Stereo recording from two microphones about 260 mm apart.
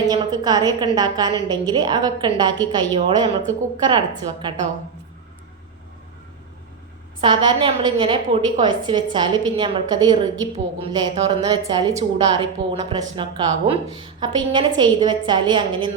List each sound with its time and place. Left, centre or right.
0.1 s a woman's voice: centre
7.2 s a woman's voice: centre